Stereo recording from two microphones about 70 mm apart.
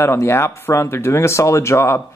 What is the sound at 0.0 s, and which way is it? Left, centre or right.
Speech, left.